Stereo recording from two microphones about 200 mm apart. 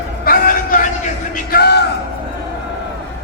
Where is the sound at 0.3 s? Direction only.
45° left (ahead or behind).